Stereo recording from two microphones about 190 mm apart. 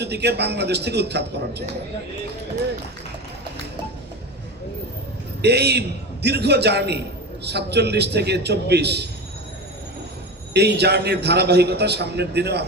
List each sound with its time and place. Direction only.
0.0 s a man's voice: 60° right (ahead or behind)
5.4 s a man's voice: 60° right (ahead or behind)
10.5 s a man's voice: 60° right (ahead or behind)